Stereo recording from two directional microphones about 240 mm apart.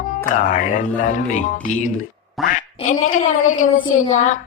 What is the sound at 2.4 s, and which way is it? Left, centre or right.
Quack, centre.